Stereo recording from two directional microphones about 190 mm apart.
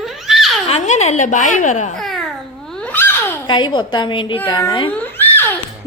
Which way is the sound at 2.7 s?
5° left (ahead or behind).